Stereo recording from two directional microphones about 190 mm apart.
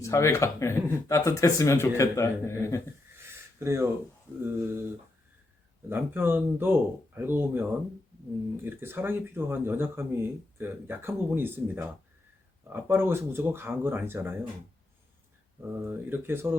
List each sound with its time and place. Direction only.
0.0 s speech: 15° left (ahead or behind)
3.2 s a sound: 15° right (ahead or behind)
4.4 s speech: 10° right (ahead or behind)
5.9 s speech: 10° right (ahead or behind)
15.7 s speech: 10° right (ahead or behind)